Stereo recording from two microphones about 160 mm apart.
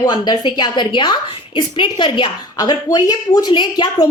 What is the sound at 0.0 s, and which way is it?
A woman's voice, 25° left (ahead or behind).